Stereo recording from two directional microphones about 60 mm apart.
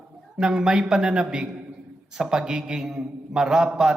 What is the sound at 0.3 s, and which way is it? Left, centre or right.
A man's voice, centre.